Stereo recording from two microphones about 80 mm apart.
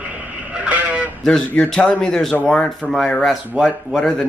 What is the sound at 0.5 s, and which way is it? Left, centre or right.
Vehicle, centre.